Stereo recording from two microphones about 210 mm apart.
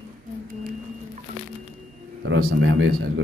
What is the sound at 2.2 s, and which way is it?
Speech, 60° right (ahead or behind).